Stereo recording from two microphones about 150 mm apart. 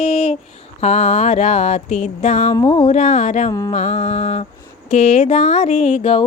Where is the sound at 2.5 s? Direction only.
30° left (ahead or behind).